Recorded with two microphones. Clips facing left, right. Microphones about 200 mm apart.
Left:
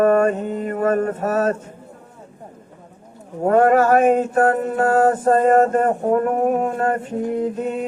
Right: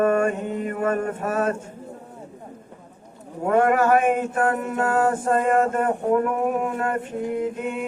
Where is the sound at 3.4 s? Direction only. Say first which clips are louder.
Left 4 dB; 40° left (ahead or behind).